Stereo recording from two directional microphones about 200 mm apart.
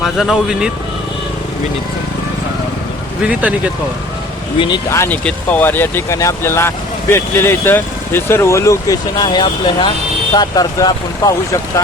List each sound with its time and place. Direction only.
0.0 s speech: centre (ahead or behind)
4.9 s speech: 10° left (ahead or behind)